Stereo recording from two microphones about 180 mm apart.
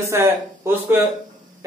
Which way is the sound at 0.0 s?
15° right (ahead or behind).